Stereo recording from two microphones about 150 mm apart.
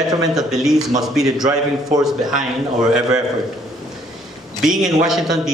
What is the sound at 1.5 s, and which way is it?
Speech, 25° right (ahead or behind).